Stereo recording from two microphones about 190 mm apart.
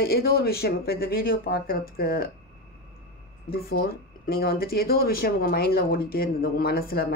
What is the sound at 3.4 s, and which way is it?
Speech, 50° left (ahead or behind).